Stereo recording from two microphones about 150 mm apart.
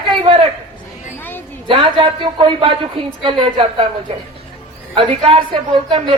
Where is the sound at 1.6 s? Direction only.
35° right (ahead or behind).